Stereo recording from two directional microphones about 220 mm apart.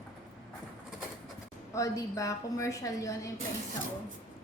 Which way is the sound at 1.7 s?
15° left (ahead or behind).